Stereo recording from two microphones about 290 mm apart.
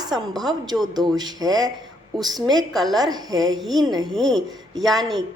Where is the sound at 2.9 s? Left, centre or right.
Centre.